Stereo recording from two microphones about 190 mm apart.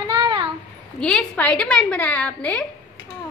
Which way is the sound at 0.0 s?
25° right (ahead or behind).